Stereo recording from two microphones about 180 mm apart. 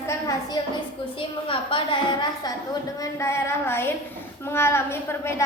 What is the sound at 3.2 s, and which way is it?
A child's voice, 15° left (ahead or behind).